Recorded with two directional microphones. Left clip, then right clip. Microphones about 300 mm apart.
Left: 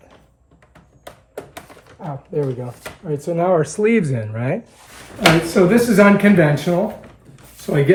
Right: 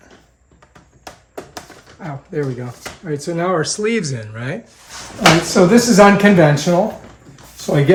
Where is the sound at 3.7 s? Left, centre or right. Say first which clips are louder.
Left 2 dB; centre.